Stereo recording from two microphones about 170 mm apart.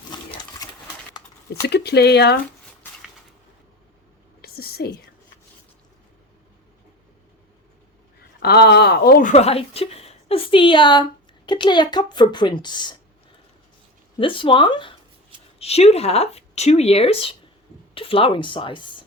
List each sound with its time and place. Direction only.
0.1 s sewing machine: 25° left (ahead or behind)
1.6 s speech: 80° left
4.4 s whispering: 65° left (ahead or behind)
8.4 s speech: 70° left (ahead or behind)
9.3 s speech: 35° left (ahead or behind)
14.2 s speech: 30° left (ahead or behind)